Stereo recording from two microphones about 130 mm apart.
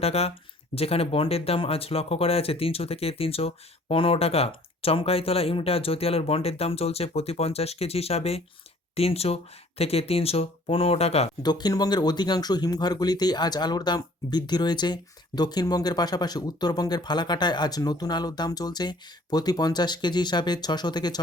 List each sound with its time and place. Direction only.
0.0 s speech: 50° left (ahead or behind)
11.4 s speech: 30° left (ahead or behind)